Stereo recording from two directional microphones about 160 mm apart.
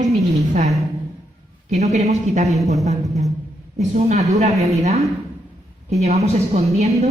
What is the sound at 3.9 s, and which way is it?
Speech, 45° right (ahead or behind).